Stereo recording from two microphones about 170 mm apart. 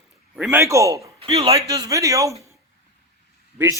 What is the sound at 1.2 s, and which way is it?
Speech, 35° right (ahead or behind).